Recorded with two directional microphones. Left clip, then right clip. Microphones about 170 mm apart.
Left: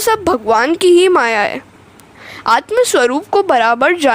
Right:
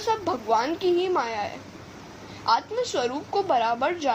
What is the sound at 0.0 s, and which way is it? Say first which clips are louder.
Speech: left 12 dB; 65° left (ahead or behind).